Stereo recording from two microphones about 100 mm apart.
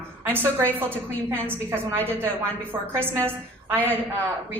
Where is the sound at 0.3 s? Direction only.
20° right (ahead or behind).